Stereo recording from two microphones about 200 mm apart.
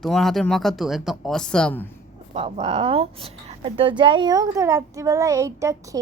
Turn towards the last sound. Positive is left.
turn(degrees=-15)  # may be behind; listen again after turning